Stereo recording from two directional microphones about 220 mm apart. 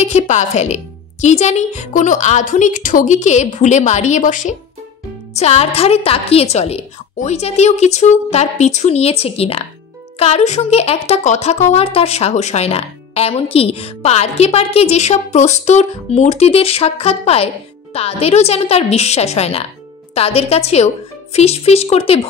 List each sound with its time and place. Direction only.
0.0 s a woman's voice: 30° left (ahead or behind)